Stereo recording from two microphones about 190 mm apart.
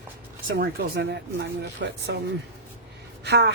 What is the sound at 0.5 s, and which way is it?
Speech, 60° right (ahead or behind).